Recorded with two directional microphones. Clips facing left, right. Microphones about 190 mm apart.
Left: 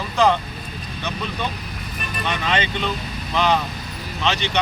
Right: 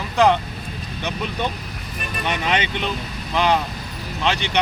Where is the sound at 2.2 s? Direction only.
15° right (ahead or behind).